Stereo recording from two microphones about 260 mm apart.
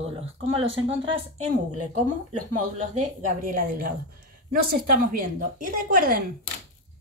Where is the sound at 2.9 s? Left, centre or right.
Right.